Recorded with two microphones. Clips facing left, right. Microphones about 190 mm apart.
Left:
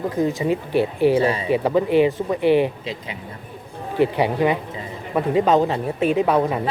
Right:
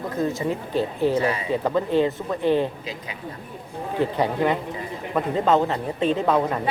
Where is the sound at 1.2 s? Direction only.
30° left (ahead or behind).